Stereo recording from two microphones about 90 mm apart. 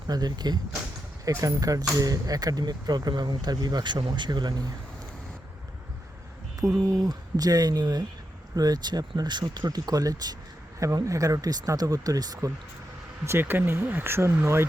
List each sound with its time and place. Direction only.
0.1 s speech: 50° right (ahead or behind)
6.9 s speech: 45° right (ahead or behind)
13.2 s speech: 25° right (ahead or behind)